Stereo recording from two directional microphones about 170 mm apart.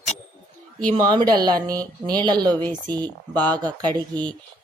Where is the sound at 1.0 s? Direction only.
25° right (ahead or behind).